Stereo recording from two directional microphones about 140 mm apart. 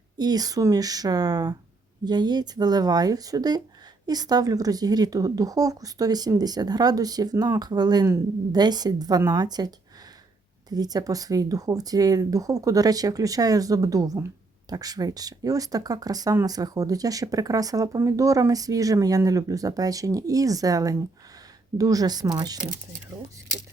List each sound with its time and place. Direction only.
0.2 s speech: 30° right (ahead or behind)